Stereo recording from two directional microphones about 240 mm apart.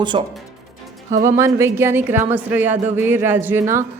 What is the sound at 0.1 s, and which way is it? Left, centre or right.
Speech, right.